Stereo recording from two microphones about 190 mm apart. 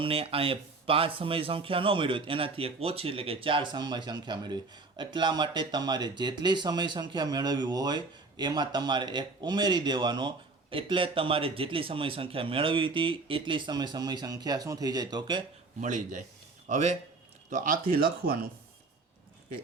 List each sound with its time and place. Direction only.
0.0 s a man's voice: 30° right (ahead or behind)
15.8 s speech: 40° right (ahead or behind)